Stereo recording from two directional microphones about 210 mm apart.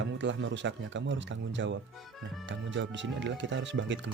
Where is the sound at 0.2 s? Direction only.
60° right (ahead or behind).